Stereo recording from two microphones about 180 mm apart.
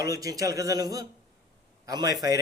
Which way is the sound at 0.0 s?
20° right (ahead or behind).